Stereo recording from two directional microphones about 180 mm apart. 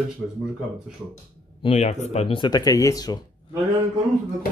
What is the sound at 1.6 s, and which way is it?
Speech, 35° left (ahead or behind).